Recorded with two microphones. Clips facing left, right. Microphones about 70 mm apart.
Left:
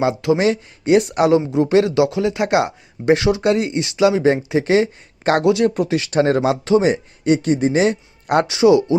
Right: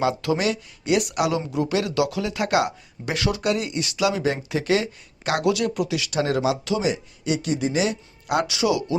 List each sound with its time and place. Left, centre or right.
0.0 s speech: left
1.4 s speech: left
8.4 s speech: left